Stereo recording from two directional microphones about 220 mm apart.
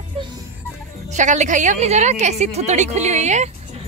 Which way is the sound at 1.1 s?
35° right (ahead or behind).